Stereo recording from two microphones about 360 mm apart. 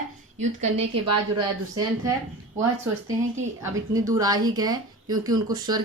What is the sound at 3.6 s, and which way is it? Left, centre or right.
A woman's voice, centre.